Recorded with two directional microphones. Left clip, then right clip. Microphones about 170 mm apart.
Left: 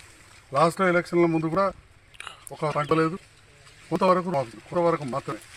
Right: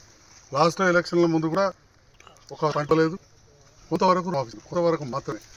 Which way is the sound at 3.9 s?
30° right (ahead or behind).